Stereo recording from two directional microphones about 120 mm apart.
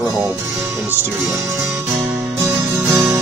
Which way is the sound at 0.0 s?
20° right (ahead or behind).